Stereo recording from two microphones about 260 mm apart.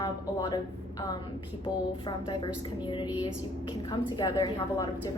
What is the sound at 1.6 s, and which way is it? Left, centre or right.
A woman's voice, centre.